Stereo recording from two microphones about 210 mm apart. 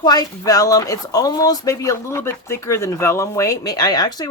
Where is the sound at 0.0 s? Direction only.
20° left (ahead or behind).